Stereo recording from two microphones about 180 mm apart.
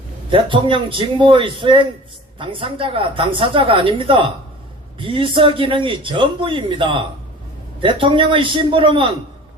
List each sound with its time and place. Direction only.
0.3 s a man's voice: 30° right (ahead or behind)